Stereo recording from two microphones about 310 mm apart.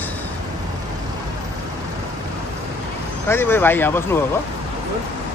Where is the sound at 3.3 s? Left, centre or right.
Centre.